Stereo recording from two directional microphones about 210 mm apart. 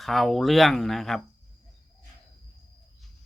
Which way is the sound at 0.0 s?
Centre (ahead or behind).